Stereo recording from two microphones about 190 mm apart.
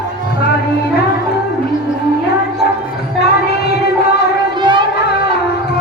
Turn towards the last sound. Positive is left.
turn(degrees=-25)  # may be behind; listen again after turning